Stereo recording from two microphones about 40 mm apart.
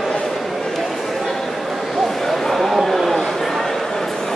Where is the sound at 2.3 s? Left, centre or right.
Centre.